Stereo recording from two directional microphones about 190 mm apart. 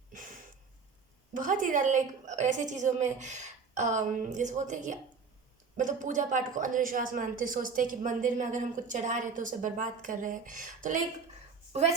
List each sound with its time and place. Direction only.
1.3 s a woman's voice: 45° right (ahead or behind)